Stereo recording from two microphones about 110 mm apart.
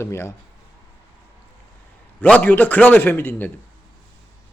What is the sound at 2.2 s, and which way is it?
A man's voice, 15° left (ahead or behind).